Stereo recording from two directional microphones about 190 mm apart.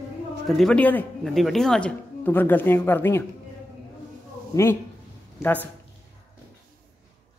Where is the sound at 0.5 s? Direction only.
Centre (ahead or behind).